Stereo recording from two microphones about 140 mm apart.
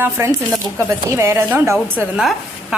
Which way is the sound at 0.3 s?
20° right (ahead or behind).